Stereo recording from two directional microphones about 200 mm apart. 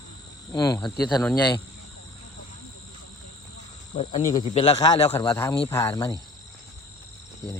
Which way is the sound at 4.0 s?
35° left (ahead or behind).